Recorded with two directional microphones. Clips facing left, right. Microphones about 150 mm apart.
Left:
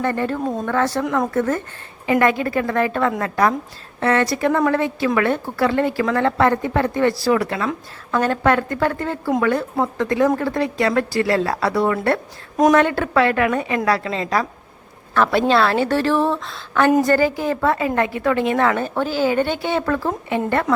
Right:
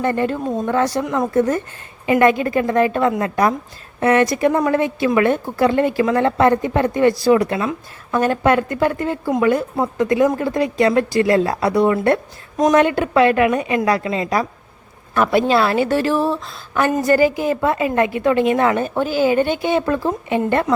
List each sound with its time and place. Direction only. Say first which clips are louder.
0.0 s a woman's voice: right 2 dB; 20° right (ahead or behind)
2.0 s a woman's voice: right 3 dB; 20° right (ahead or behind)